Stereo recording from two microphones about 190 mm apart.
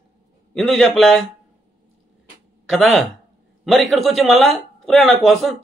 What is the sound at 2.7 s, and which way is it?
Speech, centre (ahead or behind).